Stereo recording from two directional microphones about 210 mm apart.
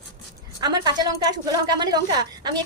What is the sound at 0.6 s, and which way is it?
A woman's voice, 20° right (ahead or behind).